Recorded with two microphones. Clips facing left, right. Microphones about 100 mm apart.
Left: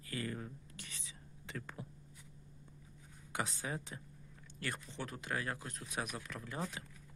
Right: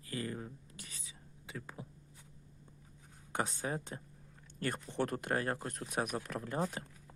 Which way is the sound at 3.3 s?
40° right (ahead or behind).